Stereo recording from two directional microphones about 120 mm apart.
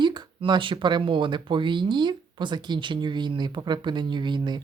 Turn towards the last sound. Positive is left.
turn(degrees=-40)  # may be behind; listen again after turning